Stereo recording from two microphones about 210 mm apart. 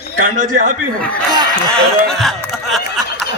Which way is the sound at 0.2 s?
40° right (ahead or behind).